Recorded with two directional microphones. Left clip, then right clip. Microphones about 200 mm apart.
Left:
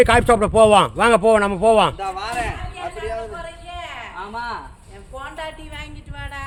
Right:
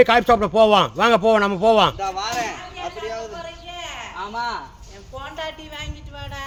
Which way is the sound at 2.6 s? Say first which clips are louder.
Left 1 dB; centre (ahead or behind).